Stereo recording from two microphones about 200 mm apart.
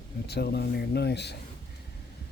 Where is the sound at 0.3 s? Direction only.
55° left (ahead or behind).